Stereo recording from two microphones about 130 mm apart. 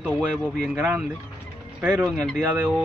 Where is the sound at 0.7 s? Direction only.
15° right (ahead or behind).